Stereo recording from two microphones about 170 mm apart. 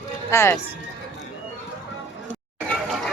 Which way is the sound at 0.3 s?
15° left (ahead or behind).